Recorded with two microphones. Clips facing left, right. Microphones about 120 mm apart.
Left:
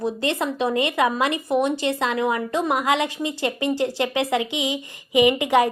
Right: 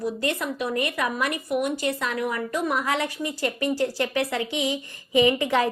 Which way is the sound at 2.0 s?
90° left.